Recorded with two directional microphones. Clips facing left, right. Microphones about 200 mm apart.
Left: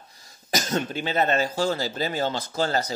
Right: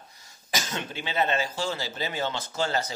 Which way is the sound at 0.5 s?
40° left (ahead or behind).